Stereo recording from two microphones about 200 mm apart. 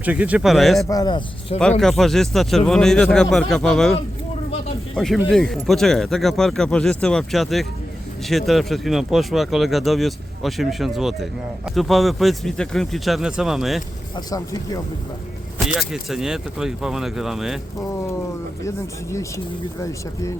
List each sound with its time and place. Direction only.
0.0 s speech: 5° right (ahead or behind)
0.9 s speech: 20° left (ahead or behind)
1.8 s speech: centre (ahead or behind)
4.9 s speech: centre (ahead or behind)
14.3 s speech: 20° left (ahead or behind)
15.9 s speech: centre (ahead or behind)